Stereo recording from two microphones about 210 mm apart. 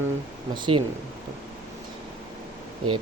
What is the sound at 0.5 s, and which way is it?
Speech, 25° right (ahead or behind).